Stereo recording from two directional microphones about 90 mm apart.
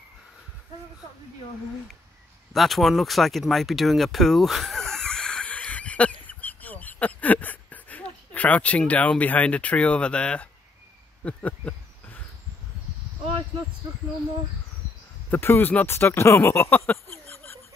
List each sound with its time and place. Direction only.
2.5 s speech: centre (ahead or behind)
11.2 s a sound: 15° left (ahead or behind)
15.3 s speech: 25° left (ahead or behind)